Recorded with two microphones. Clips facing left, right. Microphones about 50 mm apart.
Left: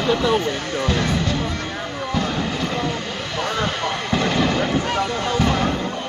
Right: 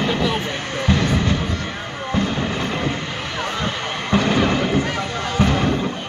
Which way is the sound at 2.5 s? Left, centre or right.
Right.